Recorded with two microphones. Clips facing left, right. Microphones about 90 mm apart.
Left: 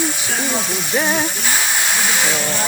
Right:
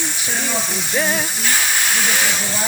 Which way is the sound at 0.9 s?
15° left (ahead or behind).